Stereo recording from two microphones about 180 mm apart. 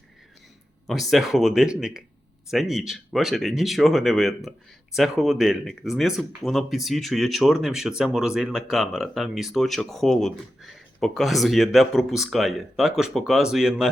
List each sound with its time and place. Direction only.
0.9 s speech: centre (ahead or behind)